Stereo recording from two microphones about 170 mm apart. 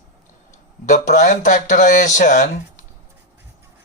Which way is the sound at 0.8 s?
45° left (ahead or behind).